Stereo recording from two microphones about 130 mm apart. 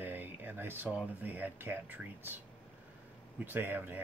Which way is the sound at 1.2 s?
15° right (ahead or behind).